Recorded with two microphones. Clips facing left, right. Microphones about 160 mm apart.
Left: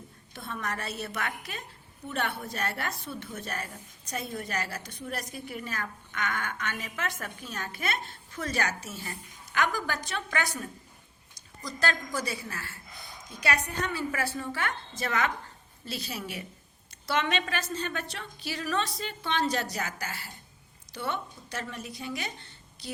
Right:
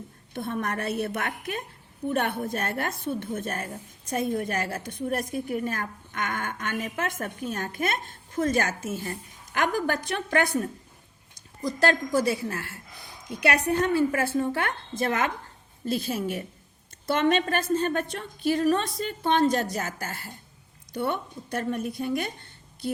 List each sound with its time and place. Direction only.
0.3 s a woman's voice: 55° right (ahead or behind)